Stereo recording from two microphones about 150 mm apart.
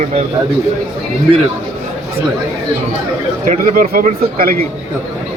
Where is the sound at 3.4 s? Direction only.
65° right (ahead or behind); by 4.5 s 80° right.